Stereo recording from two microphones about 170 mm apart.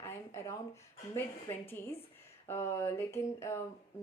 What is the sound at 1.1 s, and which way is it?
A woman's voice, 15° left (ahead or behind).